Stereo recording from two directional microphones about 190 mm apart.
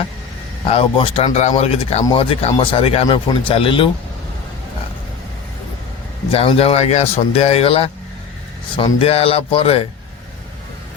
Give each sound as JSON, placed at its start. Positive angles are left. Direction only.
{"t": 0.7, "sound": "speech", "side_deg": 30}
{"t": 6.3, "sound": "speech", "side_deg": 30}